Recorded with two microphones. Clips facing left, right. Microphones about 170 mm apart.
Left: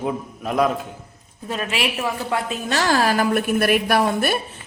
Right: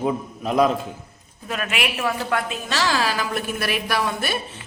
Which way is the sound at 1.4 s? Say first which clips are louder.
Left 2 dB; 30° left (ahead or behind).